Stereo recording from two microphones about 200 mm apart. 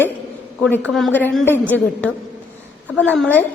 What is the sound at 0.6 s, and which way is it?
A woman's voice, 5° left (ahead or behind).